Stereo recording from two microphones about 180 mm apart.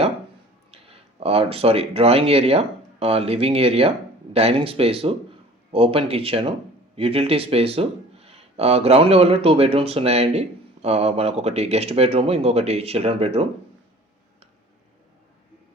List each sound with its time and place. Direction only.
0.7 s speech: 35° right (ahead or behind)